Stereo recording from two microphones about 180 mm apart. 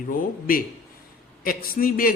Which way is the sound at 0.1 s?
50° left (ahead or behind).